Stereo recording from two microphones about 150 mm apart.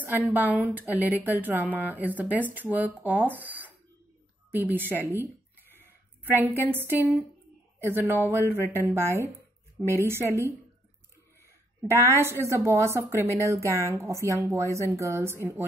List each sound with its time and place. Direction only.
0.0 s speech: 10° right (ahead or behind)
6.3 s a woman's voice: 15° right (ahead or behind)
12.2 s a woman's voice: 15° right (ahead or behind)